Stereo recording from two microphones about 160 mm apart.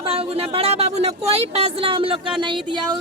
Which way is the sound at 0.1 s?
40° right (ahead or behind).